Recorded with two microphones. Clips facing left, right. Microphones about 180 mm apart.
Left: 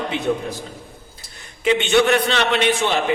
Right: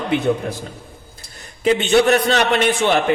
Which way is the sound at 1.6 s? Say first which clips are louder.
Right 2 dB; 35° right (ahead or behind).